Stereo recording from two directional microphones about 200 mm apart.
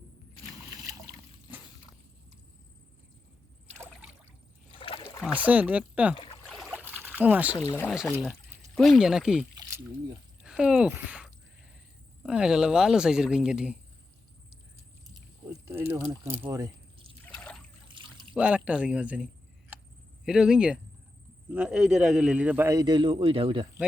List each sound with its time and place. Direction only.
4.8 s rowboat: 25° left (ahead or behind)
5.2 s a man's voice: 10° right (ahead or behind)
6.1 s a sound: 25° left (ahead or behind)
6.5 s trickle: 5° right (ahead or behind)
7.5 s speech: 15° left (ahead or behind)
7.9 s a man's voice: centre (ahead or behind)
9.6 s rowboat: 15° right (ahead or behind)
10.4 s speech: 5° right (ahead or behind)
15.4 s a man's voice: 15° right (ahead or behind)
17.2 s trickle: 5° left (ahead or behind)
17.8 s trickle: 25° right (ahead or behind)
18.3 s a man's voice: 5° right (ahead or behind); by 23.6 s 25° right (ahead or behind)